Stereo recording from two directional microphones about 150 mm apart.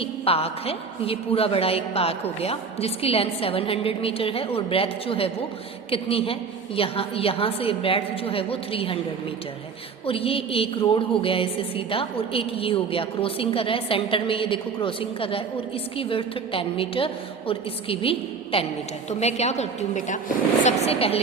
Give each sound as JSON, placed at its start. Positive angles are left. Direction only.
{"t": 0.0, "sound": "a woman's voice", "side_deg": 40}
{"t": 10.1, "sound": "a woman's voice", "side_deg": 40}